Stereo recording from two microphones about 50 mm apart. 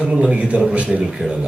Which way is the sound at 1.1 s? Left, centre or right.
Centre.